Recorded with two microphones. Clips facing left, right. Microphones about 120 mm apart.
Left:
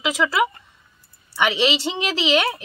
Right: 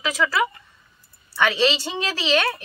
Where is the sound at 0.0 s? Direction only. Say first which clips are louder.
Left 2 dB; 25° left (ahead or behind).